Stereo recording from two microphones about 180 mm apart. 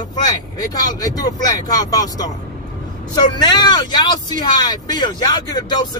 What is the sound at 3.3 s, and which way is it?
A man's voice, 25° left (ahead or behind).